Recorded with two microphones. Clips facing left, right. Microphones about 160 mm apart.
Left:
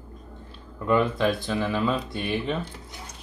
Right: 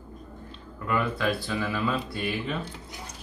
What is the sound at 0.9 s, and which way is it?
Speech, 20° left (ahead or behind).